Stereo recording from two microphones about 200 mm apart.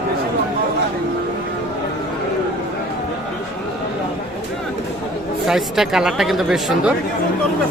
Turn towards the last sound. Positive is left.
turn(degrees=0)  # may be behind; listen again after turning